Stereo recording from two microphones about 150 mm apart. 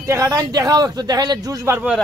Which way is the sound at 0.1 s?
25° right (ahead or behind).